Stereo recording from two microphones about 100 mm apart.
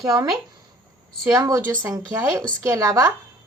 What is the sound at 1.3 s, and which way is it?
A woman's voice, 35° right (ahead or behind).